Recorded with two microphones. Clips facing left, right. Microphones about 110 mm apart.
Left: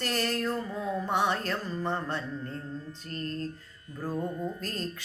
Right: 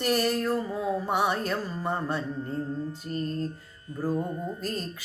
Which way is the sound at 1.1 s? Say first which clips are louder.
Even; 10° right (ahead or behind).